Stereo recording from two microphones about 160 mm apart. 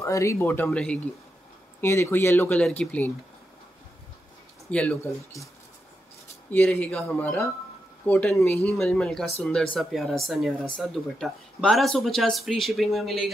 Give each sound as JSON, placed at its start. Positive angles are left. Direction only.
{"t": 0.0, "sound": "speech", "side_deg": 20}
{"t": 1.8, "sound": "speech", "side_deg": 15}
{"t": 4.6, "sound": "speech", "side_deg": 10}
{"t": 6.5, "sound": "speech", "side_deg": 10}